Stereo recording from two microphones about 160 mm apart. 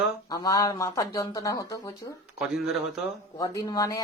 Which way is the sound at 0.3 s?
25° left (ahead or behind).